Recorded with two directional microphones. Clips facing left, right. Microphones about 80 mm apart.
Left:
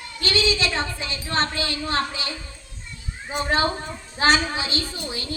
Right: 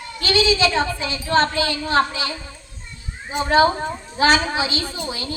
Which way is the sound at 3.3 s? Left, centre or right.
Right.